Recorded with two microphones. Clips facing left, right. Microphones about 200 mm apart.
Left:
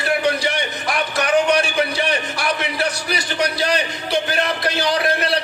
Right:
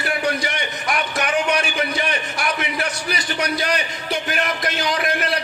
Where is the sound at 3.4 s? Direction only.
30° left (ahead or behind).